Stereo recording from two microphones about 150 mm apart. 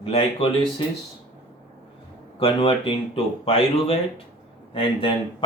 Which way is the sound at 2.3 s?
40° left (ahead or behind).